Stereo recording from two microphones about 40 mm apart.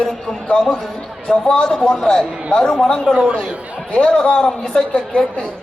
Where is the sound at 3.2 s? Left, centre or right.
Right.